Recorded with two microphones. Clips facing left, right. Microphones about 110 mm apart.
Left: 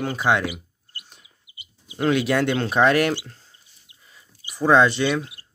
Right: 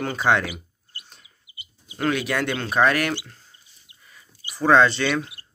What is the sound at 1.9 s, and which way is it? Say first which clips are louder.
Speech: left 3 dB; 25° left (ahead or behind).